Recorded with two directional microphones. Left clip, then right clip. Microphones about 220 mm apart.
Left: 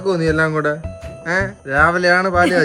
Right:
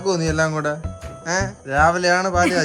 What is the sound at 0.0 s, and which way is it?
Speech, 15° right (ahead or behind).